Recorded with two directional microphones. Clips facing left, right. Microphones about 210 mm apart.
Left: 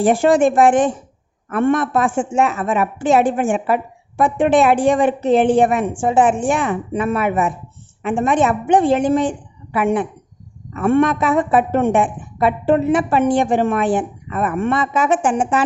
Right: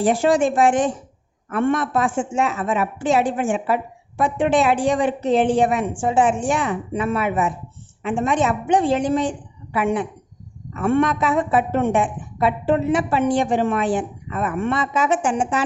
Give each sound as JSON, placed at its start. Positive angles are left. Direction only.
{"t": 0.0, "sound": "a woman's voice", "side_deg": 55}